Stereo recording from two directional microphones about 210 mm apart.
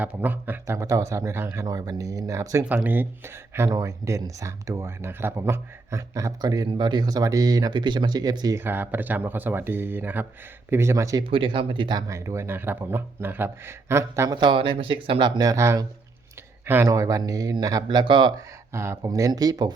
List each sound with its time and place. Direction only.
0.0 s speech: 10° right (ahead or behind)